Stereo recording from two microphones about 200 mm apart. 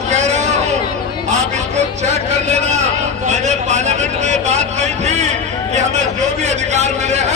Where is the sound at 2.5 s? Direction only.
35° right (ahead or behind).